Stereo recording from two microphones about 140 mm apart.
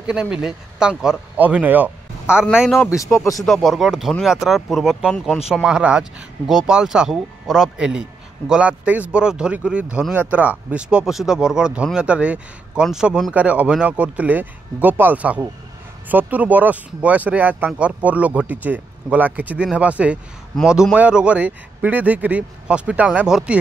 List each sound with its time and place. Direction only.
0.0 s speech: 5° right (ahead or behind)
2.8 s speech: 25° left (ahead or behind)
3.4 s speech: centre (ahead or behind)